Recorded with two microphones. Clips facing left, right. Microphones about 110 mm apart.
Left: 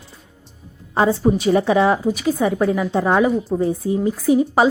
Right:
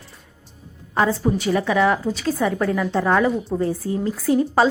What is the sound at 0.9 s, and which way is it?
A woman's voice, 20° left (ahead or behind).